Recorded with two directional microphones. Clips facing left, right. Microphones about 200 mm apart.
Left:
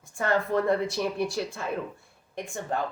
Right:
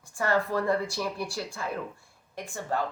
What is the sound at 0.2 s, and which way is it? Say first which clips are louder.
Speech: left 2 dB; 20° left (ahead or behind).